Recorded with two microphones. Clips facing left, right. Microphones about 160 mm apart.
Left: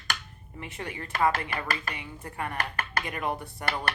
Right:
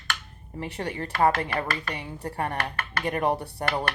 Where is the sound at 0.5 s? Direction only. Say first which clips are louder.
Right 6 dB; 35° right (ahead or behind).